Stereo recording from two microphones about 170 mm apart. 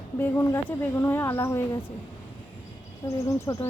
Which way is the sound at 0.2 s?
15° left (ahead or behind).